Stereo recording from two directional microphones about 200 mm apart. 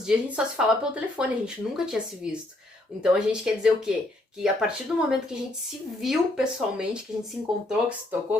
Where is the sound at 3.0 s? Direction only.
5° right (ahead or behind).